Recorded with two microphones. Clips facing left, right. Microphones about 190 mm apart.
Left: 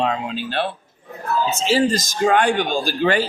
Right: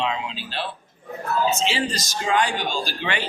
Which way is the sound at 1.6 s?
45° left (ahead or behind).